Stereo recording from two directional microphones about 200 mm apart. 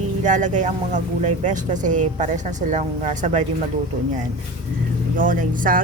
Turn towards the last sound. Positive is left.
turn(degrees=-40)  # may be behind; listen again after turning